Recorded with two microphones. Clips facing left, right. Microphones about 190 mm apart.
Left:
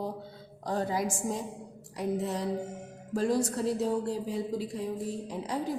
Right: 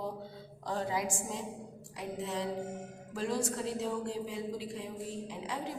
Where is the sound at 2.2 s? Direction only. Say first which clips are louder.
Left 4 dB; 40° left (ahead or behind).